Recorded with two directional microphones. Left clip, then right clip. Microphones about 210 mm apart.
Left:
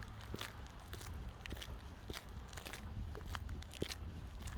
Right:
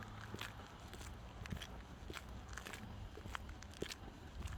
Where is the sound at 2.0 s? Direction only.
40° left (ahead or behind).